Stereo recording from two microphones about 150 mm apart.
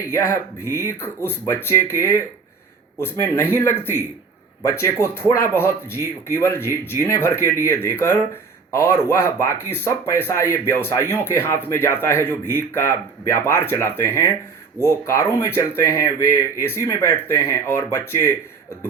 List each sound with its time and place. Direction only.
0.1 s speech: 20° left (ahead or behind)